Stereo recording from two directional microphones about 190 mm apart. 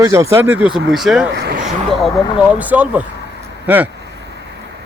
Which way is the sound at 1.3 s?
55° right (ahead or behind).